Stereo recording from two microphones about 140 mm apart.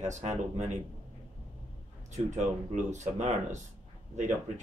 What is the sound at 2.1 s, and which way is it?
Speech, 55° right (ahead or behind).